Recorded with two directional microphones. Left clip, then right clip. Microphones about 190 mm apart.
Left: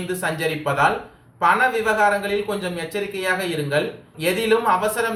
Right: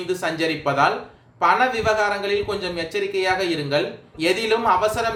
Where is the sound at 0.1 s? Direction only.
50° right (ahead or behind).